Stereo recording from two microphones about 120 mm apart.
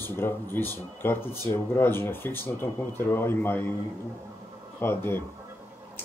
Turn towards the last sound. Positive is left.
turn(degrees=20)  # may be behind; listen again after turning